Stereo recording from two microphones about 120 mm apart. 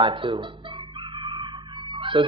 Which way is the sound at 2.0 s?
45° right (ahead or behind).